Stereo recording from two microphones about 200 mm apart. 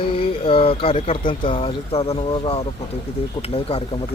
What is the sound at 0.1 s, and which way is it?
Speech, 25° left (ahead or behind).